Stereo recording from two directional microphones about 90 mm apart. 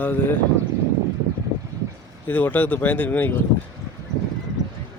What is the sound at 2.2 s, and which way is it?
Speech, 20° left (ahead or behind).